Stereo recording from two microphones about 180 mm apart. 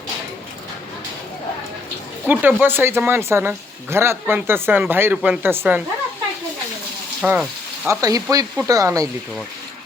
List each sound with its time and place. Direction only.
2.2 s speech: 10° right (ahead or behind)
7.2 s speech: 5° right (ahead or behind)
7.9 s speech: 20° right (ahead or behind)